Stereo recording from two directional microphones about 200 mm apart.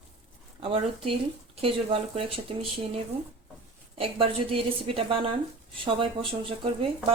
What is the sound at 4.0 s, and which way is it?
A woman's voice, 30° right (ahead or behind).